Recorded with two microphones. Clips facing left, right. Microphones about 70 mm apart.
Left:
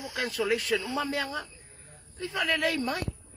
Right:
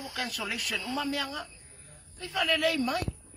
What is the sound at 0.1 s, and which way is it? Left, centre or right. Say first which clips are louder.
Speech: left 9 dB; left.